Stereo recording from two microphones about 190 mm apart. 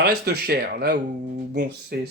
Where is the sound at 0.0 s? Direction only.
55° right (ahead or behind).